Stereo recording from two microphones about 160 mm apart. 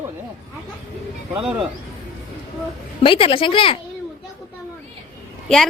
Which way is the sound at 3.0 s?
35° left (ahead or behind).